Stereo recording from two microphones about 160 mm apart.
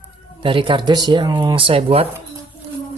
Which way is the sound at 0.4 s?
30° right (ahead or behind).